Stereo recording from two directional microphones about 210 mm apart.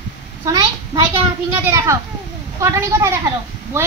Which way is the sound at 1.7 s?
15° right (ahead or behind).